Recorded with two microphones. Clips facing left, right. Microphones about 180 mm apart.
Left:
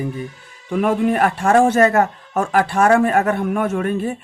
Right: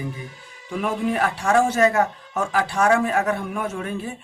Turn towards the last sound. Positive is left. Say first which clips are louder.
# left 8 dB
turn(degrees=60)  # may be behind; listen again after turning